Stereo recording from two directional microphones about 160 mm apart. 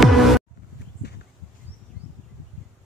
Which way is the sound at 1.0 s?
90° left.